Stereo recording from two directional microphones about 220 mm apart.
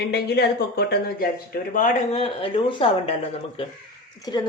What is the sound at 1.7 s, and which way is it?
Speech, 35° left (ahead or behind).